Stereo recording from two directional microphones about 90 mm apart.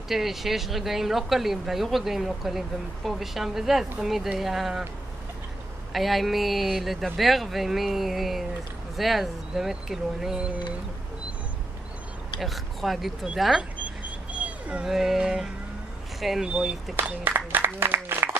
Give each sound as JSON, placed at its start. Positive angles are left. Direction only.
{"t": 0.1, "sound": "speech", "side_deg": -5}
{"t": 5.9, "sound": "speech", "side_deg": 0}
{"t": 12.4, "sound": "speech", "side_deg": 0}
{"t": 14.3, "sound": "speech", "side_deg": -15}
{"t": 16.9, "sound": "applause", "side_deg": -25}